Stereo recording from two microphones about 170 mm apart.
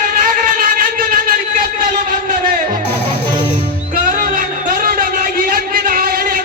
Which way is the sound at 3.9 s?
55° right (ahead or behind).